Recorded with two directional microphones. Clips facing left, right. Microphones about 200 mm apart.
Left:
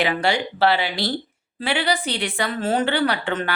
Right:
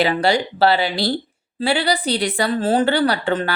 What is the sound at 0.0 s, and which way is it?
A woman's voice, 35° right (ahead or behind).